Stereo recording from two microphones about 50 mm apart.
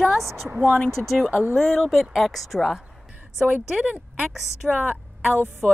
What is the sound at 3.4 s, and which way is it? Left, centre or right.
Speech, right.